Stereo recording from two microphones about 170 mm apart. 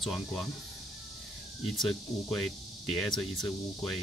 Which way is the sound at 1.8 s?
5° left (ahead or behind).